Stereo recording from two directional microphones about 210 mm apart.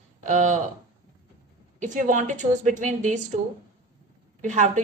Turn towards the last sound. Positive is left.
turn(degrees=-35)  # may be behind; listen again after turning